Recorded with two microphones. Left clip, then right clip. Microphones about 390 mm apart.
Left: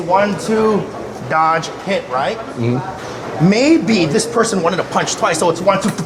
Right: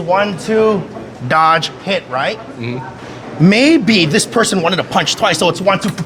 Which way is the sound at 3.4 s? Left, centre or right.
Right.